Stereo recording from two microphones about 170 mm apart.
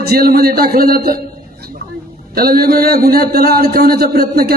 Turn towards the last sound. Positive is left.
turn(degrees=-65)  # may be behind; listen again after turning